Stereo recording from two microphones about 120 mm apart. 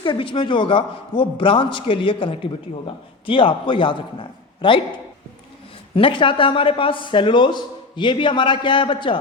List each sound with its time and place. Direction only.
0.0 s a man's voice: 45° left (ahead or behind)
5.9 s a man's voice: 45° left (ahead or behind)